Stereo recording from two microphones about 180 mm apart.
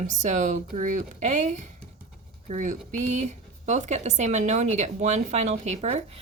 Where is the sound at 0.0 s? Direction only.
40° right (ahead or behind).